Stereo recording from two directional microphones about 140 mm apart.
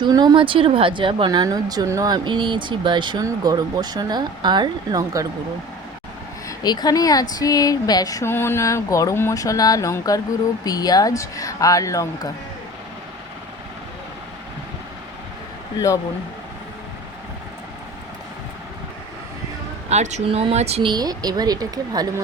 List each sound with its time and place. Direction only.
0.0 s a woman's voice: 30° right (ahead or behind)
6.6 s speech: 30° left (ahead or behind)
19.9 s speech: 55° right (ahead or behind)
20.9 s speech: 30° right (ahead or behind)